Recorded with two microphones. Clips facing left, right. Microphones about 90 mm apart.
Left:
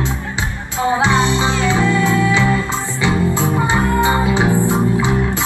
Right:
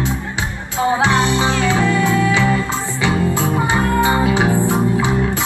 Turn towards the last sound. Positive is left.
turn(degrees=25)  # may be behind; listen again after turning